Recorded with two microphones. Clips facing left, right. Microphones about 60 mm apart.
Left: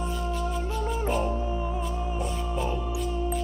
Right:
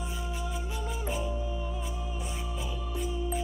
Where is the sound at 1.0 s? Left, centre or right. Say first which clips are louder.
Left 7 dB; left.